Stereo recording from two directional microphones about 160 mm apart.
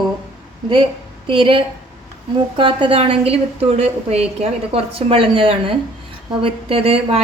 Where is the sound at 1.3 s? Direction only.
35° right (ahead or behind).